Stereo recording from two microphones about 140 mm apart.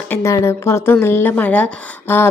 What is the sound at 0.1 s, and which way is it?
A woman's voice, 20° left (ahead or behind).